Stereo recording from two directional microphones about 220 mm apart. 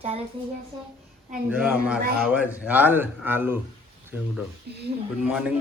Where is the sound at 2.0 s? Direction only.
45° right (ahead or behind).